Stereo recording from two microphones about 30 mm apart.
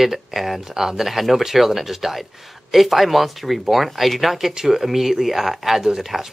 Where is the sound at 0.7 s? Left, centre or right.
Centre.